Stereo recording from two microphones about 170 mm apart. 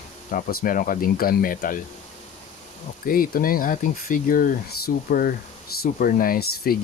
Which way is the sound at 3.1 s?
60° left (ahead or behind).